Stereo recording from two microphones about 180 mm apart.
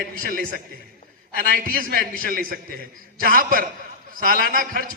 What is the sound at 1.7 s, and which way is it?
A man's voice, 50° right (ahead or behind).